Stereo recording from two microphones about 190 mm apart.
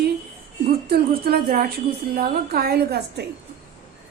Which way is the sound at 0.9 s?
55° right (ahead or behind).